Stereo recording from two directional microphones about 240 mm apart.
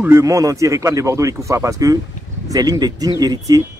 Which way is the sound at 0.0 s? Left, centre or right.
Centre.